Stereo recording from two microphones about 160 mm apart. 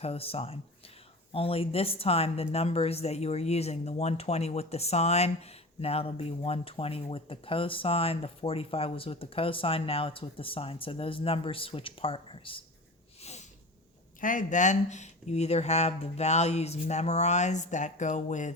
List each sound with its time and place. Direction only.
0.0 s speech: 40° left (ahead or behind)
14.2 s speech: 55° left (ahead or behind)